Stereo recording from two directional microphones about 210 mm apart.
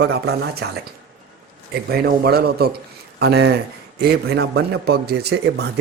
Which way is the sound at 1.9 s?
50° right (ahead or behind).